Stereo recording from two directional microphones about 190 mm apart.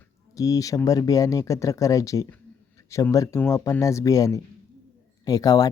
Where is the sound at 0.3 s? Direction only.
20° left (ahead or behind).